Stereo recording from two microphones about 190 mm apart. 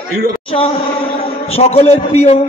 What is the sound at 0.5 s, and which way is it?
A man's voice, 30° left (ahead or behind).